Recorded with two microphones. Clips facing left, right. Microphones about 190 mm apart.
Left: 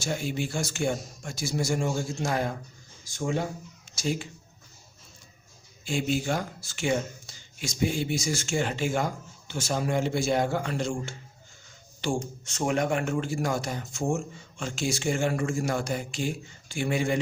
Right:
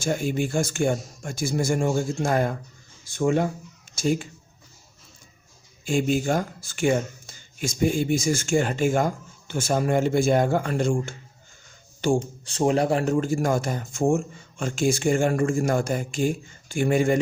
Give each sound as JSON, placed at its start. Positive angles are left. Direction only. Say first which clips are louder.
{"t": 0.0, "sound": "speech", "louder": "right 5 dB", "side_deg": -50}
{"t": 3.9, "sound": "speech", "louder": "right 6 dB", "side_deg": -50}
{"t": 5.8, "sound": "speech", "louder": "right 5 dB", "side_deg": -45}
{"t": 12.2, "sound": "speech", "louder": "right 7 dB", "side_deg": -30}